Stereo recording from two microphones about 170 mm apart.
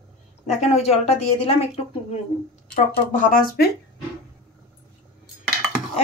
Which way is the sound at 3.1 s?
55° left (ahead or behind).